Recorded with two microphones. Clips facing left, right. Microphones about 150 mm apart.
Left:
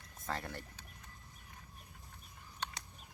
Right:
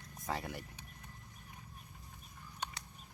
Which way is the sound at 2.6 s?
10° right (ahead or behind).